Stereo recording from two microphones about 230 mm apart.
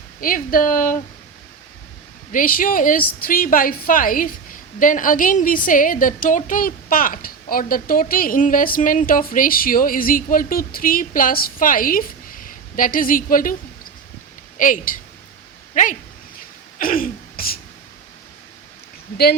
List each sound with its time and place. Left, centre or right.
0.2 s a woman's voice: left
2.3 s a woman's voice: left
14.6 s a woman's voice: left
16.7 s throat clearing: left
19.1 s speech: left